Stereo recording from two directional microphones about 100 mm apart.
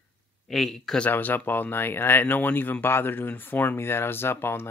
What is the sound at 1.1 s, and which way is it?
Speech, 20° left (ahead or behind).